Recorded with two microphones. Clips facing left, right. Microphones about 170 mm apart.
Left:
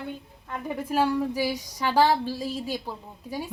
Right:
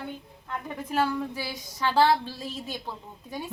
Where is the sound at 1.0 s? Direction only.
15° left (ahead or behind).